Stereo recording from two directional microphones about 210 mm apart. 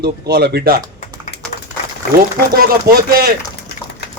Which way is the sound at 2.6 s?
45° right (ahead or behind).